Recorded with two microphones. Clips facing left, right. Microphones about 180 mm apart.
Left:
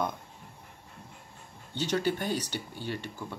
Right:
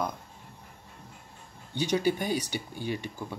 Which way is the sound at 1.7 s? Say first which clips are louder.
Right 2 dB; 15° right (ahead or behind).